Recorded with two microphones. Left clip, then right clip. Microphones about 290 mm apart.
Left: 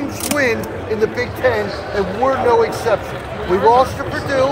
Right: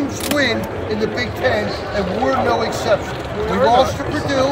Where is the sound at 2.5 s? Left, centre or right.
Centre.